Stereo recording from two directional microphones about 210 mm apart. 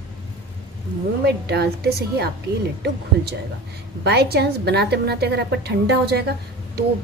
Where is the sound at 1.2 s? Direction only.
50° right (ahead or behind).